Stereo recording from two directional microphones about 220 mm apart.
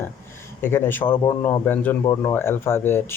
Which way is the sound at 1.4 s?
10° left (ahead or behind).